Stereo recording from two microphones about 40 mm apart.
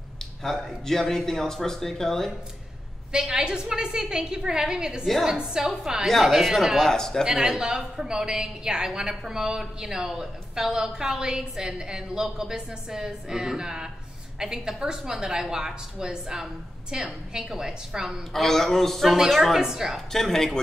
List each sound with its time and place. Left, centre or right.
0.4 s speech: centre
3.1 s a woman's voice: centre
6.0 s a woman's voice: centre
6.8 s speech: centre
7.2 s a woman's voice: centre
18.3 s a woman's voice: centre
19.6 s a woman's voice: centre
20.1 s speech: centre